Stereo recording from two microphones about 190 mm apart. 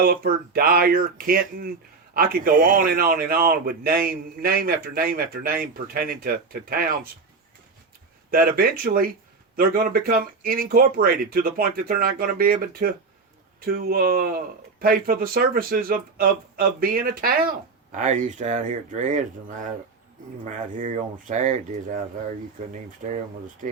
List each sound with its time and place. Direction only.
0.0 s a man's voice: 50° right (ahead or behind)
8.3 s a man's voice: 50° right (ahead or behind)
23.0 s a man's voice: 40° right (ahead or behind)